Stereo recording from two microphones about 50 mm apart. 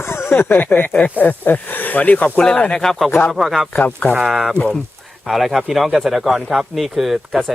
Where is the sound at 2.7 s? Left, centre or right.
Centre.